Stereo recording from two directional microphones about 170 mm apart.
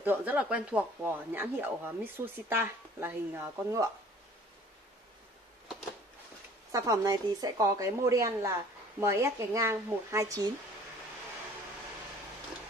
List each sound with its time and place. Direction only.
0.0 s speech: 10° right (ahead or behind)
6.7 s a woman's voice: 20° right (ahead or behind)